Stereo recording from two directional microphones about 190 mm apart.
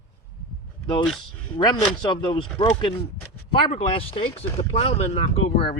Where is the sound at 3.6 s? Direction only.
30° left (ahead or behind).